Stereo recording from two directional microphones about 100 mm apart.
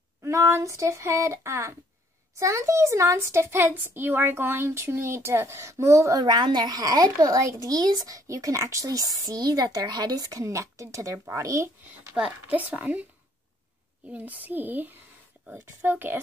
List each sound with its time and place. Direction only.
0.2 s a child's voice: 30° right (ahead or behind)
12.2 s a woman's voice: 15° right (ahead or behind)
14.1 s a child's voice: 15° right (ahead or behind)